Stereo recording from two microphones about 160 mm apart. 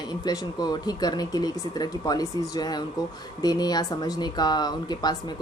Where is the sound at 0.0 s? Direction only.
25° left (ahead or behind).